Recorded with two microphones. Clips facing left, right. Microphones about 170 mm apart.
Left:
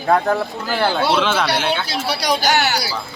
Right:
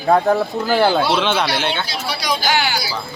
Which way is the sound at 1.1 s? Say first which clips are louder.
Even; centre (ahead or behind).